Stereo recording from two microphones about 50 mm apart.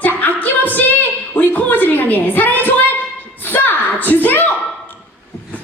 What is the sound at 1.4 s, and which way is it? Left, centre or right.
A woman's voice, left.